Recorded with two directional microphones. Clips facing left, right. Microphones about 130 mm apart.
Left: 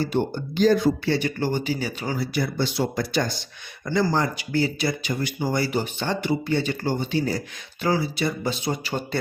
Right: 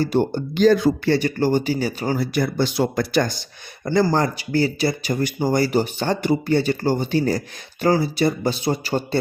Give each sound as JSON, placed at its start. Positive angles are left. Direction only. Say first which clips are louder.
{"t": 0.0, "sound": "speech", "louder": "right 4 dB", "side_deg": -40}
{"t": 0.5, "sound": "speech", "louder": "right 3 dB", "side_deg": -80}
{"t": 1.0, "sound": "speech", "louder": "right 5 dB", "side_deg": -40}
{"t": 3.8, "sound": "speech", "louder": "right 4 dB", "side_deg": -45}